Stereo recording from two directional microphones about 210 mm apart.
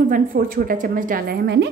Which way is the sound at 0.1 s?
40° right (ahead or behind).